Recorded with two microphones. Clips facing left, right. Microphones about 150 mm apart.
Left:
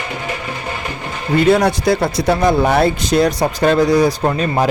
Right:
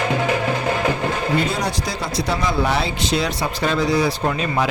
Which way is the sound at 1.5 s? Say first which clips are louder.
Left 11 dB; 60° left (ahead or behind).